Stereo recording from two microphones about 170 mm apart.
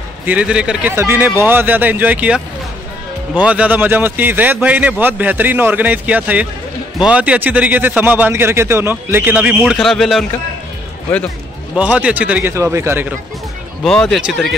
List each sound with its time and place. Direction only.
0.3 s a man's voice: 5° right (ahead or behind)
11.7 s a man's voice: 5° right (ahead or behind)
13.8 s speech: 5° left (ahead or behind)